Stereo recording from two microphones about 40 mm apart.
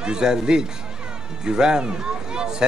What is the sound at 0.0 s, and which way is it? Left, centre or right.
A man's voice, centre.